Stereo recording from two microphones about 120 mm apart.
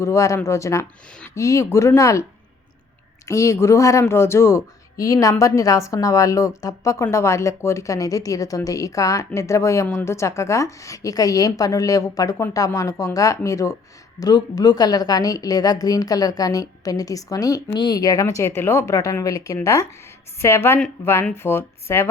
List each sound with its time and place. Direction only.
0.0 s speech: 25° left (ahead or behind)
3.2 s a woman's voice: 25° left (ahead or behind)
17.7 s speech: 40° left (ahead or behind); by 22.0 s 20° left (ahead or behind)